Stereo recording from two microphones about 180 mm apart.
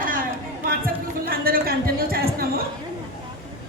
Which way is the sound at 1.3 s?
55° right (ahead or behind).